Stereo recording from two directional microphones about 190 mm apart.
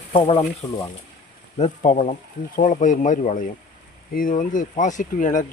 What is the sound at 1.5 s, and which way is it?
Speech, 35° left (ahead or behind).